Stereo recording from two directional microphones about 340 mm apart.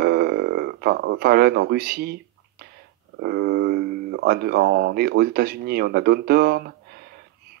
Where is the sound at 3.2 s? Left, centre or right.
Right.